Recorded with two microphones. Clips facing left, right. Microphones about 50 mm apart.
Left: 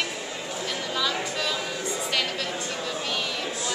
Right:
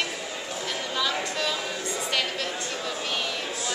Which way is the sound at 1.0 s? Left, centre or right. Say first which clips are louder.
Right 1 dB; centre.